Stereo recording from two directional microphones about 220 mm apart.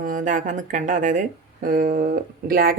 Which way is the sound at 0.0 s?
35° right (ahead or behind).